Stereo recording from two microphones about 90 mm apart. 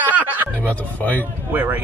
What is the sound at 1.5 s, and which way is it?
Speech, 20° right (ahead or behind).